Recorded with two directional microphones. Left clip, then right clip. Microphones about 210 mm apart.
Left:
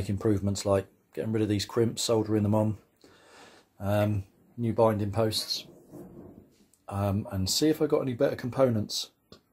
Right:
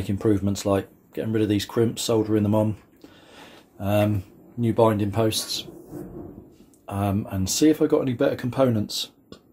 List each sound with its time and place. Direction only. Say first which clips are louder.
0.0 s speech: right 5 dB; 25° left (ahead or behind)
3.8 s speech: right 5 dB; 20° left (ahead or behind)
6.9 s speech: right 5 dB; 20° left (ahead or behind)